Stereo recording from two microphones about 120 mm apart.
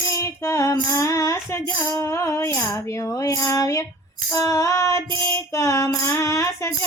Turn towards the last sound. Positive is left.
turn(degrees=25)  # may be behind; listen again after turning